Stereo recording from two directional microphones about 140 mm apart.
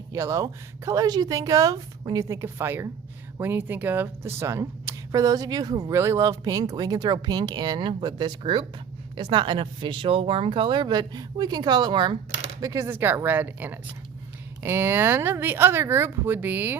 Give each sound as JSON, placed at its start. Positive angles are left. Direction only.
{"t": 0.1, "sound": "speech", "side_deg": -20}
{"t": 12.6, "sound": "speech", "side_deg": -20}